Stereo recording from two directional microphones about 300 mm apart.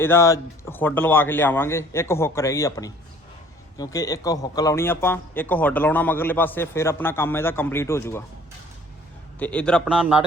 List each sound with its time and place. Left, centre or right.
0.0 s speech: centre
9.4 s a man's voice: centre